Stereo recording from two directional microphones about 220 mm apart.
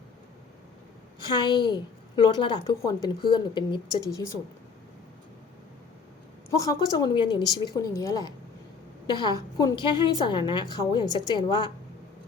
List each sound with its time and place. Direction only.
1.3 s a woman's voice: 20° left (ahead or behind)
6.6 s a woman's voice: 15° left (ahead or behind)